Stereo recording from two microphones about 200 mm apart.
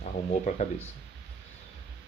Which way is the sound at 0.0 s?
35° left (ahead or behind).